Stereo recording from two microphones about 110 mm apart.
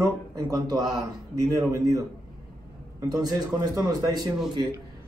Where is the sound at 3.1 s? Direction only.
35° right (ahead or behind).